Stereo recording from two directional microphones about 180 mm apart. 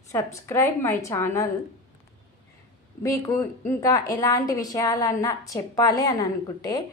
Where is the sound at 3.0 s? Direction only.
20° left (ahead or behind).